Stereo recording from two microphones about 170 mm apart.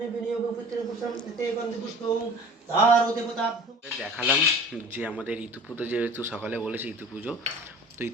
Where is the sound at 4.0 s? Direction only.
Centre (ahead or behind).